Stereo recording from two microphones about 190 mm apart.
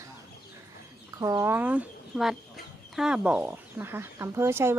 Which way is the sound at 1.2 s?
15° right (ahead or behind).